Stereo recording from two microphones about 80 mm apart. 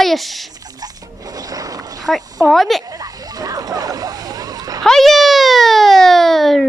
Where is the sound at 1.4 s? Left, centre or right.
Right.